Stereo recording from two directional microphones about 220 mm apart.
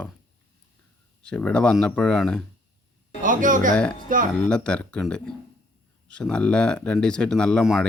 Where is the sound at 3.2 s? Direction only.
35° right (ahead or behind).